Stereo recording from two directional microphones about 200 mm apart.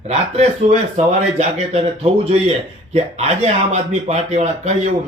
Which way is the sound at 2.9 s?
35° right (ahead or behind).